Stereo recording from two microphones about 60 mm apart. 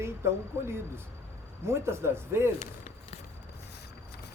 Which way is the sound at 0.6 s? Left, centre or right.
Right.